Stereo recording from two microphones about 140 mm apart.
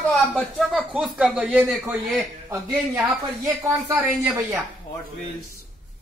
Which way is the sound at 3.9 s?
15° right (ahead or behind).